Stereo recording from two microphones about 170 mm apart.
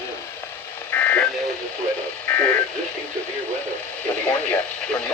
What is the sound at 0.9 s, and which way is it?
Speech, 10° left (ahead or behind).